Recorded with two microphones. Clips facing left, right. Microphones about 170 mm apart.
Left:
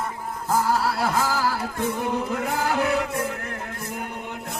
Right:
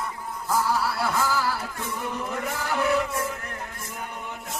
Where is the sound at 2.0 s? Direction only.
85° left.